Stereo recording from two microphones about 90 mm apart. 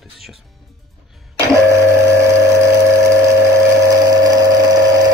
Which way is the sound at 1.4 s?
35° right (ahead or behind).